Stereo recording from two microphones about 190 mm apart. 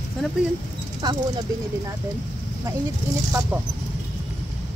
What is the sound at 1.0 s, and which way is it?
Speech, 20° right (ahead or behind).